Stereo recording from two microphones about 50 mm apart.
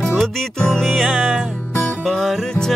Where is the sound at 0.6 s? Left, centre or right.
Centre.